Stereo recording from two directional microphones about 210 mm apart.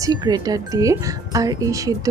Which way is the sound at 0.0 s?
20° right (ahead or behind).